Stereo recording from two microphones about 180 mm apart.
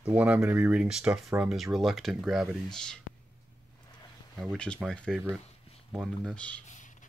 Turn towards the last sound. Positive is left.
turn(degrees=45)  # may be behind; listen again after turning